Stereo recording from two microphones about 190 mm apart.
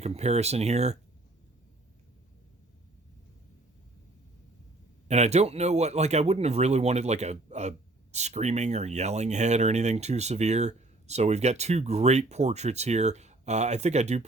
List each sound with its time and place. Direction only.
0.0 s speech: 35° right (ahead or behind)
5.0 s speech: 35° right (ahead or behind)